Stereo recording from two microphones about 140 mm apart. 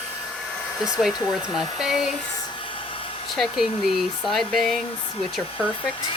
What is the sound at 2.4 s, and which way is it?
Hair dryer, 35° left (ahead or behind).